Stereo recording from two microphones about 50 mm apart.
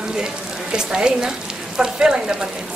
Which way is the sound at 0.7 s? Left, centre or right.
Centre.